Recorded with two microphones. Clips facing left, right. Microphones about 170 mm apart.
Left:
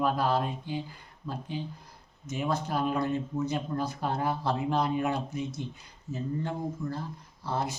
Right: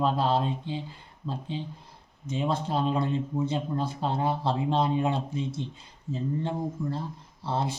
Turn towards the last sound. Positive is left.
turn(degrees=-30)  # may be behind; listen again after turning